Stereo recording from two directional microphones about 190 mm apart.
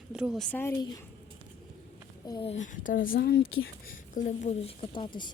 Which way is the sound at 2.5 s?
40° left (ahead or behind).